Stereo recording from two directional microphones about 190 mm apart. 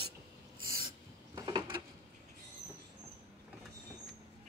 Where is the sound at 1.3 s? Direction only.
20° right (ahead or behind).